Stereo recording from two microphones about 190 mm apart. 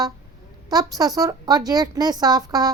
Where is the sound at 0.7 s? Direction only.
20° right (ahead or behind).